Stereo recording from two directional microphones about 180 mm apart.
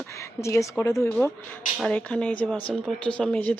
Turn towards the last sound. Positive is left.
turn(degrees=10)  # may be behind; listen again after turning